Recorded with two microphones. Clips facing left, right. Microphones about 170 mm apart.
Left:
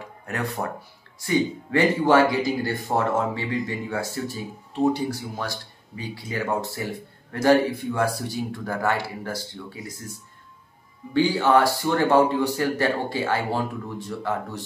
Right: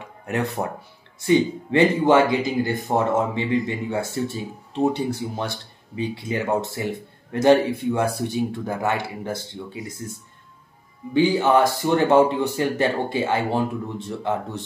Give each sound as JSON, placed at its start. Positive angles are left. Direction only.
{"t": 0.3, "sound": "speech", "side_deg": -20}
{"t": 11.1, "sound": "speech", "side_deg": -20}